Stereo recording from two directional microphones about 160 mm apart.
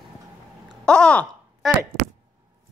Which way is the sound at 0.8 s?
5° left (ahead or behind).